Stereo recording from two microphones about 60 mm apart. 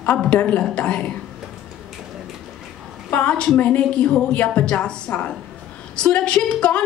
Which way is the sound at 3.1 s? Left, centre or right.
Centre.